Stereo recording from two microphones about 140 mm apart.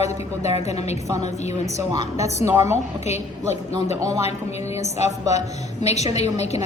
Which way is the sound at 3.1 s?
50° left (ahead or behind).